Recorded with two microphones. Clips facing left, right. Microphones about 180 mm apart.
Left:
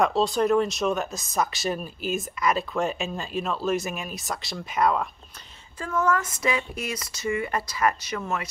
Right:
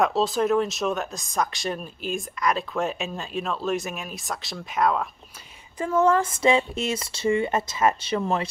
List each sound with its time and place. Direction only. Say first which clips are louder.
0.0 s speech: even; centre (ahead or behind)
5.8 s speech: right 5 dB; 25° right (ahead or behind)